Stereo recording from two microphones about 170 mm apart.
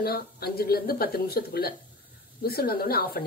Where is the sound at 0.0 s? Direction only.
65° left (ahead or behind).